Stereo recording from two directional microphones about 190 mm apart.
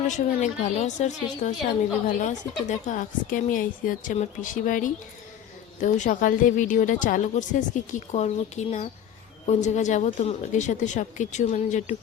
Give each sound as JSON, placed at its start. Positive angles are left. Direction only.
{"t": 0.1, "sound": "speech", "side_deg": 40}